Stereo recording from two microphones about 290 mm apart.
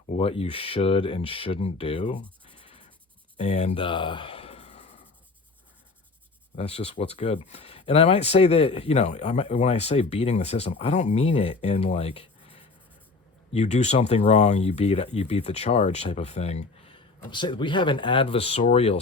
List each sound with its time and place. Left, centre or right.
0.1 s speech: centre
2.5 s writing: centre
3.3 s a sound: left
6.6 s speech: left